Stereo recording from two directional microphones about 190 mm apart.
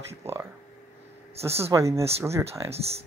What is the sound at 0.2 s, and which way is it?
Speech, 15° right (ahead or behind).